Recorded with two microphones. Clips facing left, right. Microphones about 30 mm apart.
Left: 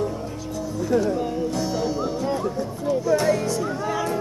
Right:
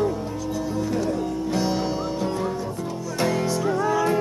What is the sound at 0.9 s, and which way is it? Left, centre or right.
Music, centre.